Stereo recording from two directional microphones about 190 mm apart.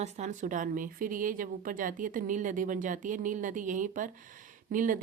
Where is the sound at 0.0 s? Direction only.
40° right (ahead or behind).